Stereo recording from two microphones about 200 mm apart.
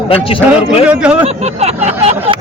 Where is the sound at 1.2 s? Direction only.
30° right (ahead or behind).